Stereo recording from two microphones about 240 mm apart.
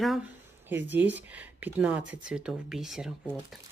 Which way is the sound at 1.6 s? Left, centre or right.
Centre.